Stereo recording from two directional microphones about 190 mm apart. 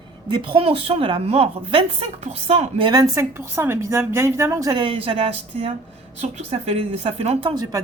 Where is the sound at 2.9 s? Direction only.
15° right (ahead or behind); by 7.5 s 35° right (ahead or behind).